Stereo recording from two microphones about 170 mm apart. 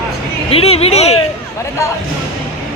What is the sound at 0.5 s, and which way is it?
Speech, 35° left (ahead or behind).